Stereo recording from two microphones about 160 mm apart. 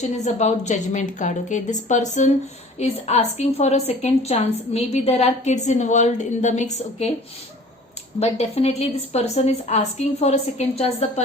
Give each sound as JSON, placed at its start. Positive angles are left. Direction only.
{"t": 0.0, "sound": "a woman's voice", "side_deg": 45}
{"t": 8.2, "sound": "a woman's voice", "side_deg": 40}